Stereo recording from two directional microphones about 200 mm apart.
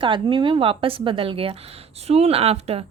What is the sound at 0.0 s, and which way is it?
Speech, 25° right (ahead or behind).